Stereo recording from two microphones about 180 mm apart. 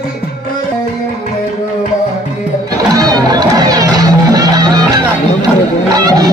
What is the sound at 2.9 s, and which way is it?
Music, 20° right (ahead or behind).